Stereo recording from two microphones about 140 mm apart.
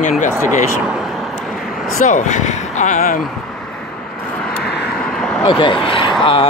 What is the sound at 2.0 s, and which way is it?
Speech, 60° left (ahead or behind).